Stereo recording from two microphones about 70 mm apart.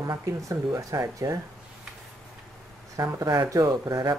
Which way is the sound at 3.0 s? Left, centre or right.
Right.